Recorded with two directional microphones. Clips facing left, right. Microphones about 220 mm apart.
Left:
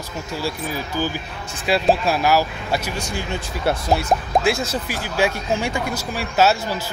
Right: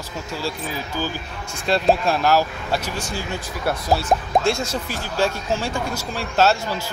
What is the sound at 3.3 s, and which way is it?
Speech, 20° left (ahead or behind).